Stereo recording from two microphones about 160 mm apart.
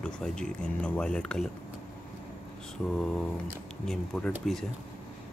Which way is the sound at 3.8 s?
5° left (ahead or behind).